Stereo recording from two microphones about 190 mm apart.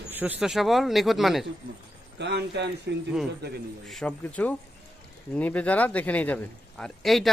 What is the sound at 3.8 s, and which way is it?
A man's voice, 5° left (ahead or behind).